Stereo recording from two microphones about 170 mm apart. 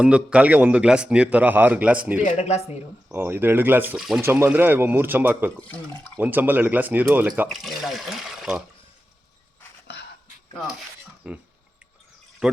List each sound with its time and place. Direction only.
0.0 s speech: 5° right (ahead or behind)
2.2 s speech: 40° left (ahead or behind)
3.1 s speech: 10° right (ahead or behind)
4.2 s speech: 15° right (ahead or behind)
11.2 s speech: 5° right (ahead or behind)
12.4 s speech: centre (ahead or behind)